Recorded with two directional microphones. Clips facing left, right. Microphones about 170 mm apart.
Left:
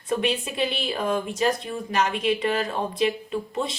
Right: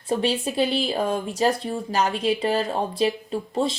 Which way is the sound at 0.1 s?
35° right (ahead or behind).